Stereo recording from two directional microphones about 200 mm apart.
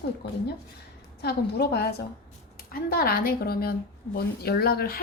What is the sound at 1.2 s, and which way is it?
A woman's voice, 55° left (ahead or behind).